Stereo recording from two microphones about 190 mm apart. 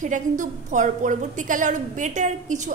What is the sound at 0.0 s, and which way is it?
A woman's voice, 40° right (ahead or behind).